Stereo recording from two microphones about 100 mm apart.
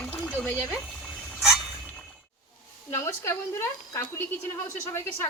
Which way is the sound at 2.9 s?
30° left (ahead or behind).